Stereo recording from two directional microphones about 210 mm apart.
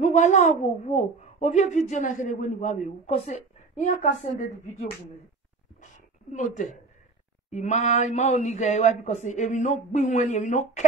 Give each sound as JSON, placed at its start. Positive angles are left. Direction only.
{"t": 0.0, "sound": "a woman's voice", "side_deg": 35}
{"t": 6.3, "sound": "a woman's voice", "side_deg": 35}